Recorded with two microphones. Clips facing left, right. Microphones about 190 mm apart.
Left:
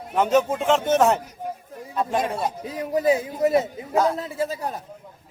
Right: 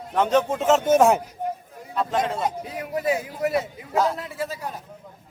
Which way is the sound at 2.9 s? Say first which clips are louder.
Left 4 dB; 25° left (ahead or behind).